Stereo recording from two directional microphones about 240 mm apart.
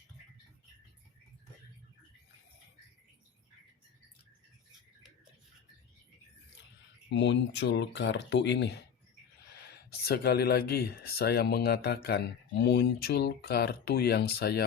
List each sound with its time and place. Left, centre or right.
7.1 s speech: left
9.9 s speech: left